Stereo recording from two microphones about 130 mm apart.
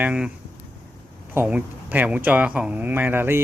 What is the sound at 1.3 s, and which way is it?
Speech, 10° right (ahead or behind).